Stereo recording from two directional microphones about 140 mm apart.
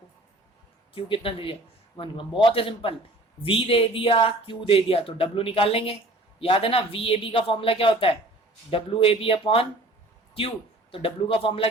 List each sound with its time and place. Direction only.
0.9 s speech: 40° left (ahead or behind)
10.9 s speech: 40° left (ahead or behind)